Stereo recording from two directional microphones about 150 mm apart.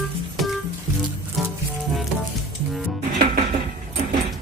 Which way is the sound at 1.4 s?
Centre (ahead or behind).